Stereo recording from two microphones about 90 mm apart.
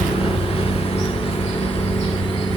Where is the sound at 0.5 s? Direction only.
90° left.